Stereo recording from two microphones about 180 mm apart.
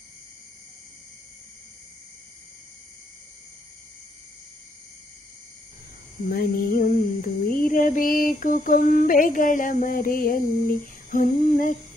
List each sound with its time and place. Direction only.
6.2 s mantra: 55° left (ahead or behind)